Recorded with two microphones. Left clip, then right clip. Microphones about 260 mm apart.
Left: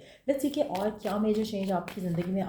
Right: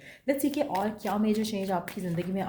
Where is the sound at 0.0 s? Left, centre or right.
Right.